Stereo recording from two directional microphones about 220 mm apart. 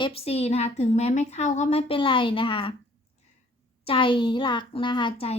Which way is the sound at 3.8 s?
25° left (ahead or behind).